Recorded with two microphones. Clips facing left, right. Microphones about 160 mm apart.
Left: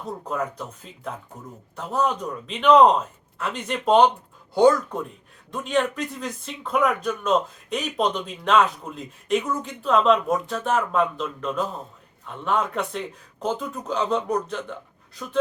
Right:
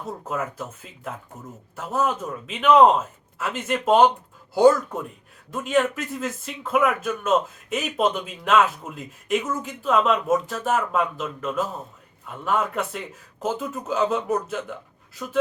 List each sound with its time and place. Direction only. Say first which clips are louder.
0.3 s speech: left 1 dB; 5° right (ahead or behind)